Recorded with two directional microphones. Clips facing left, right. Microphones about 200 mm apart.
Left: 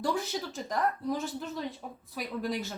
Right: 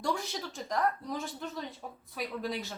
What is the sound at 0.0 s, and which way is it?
A woman's voice, centre (ahead or behind).